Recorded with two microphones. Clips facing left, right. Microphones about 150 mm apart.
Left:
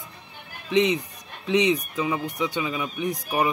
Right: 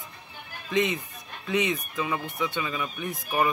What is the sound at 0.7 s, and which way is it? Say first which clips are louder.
Speech: left 5 dB; 90° left.